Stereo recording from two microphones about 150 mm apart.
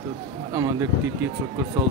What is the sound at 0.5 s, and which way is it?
Speech, 20° right (ahead or behind).